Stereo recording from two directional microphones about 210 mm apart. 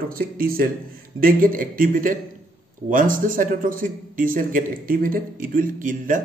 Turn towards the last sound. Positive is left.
turn(degrees=-40)  # may be behind; listen again after turning